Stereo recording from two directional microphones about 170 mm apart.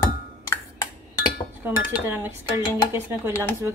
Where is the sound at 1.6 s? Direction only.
10° right (ahead or behind).